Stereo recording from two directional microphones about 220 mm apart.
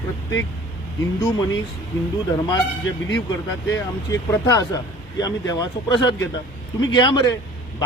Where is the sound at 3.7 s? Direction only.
15° left (ahead or behind).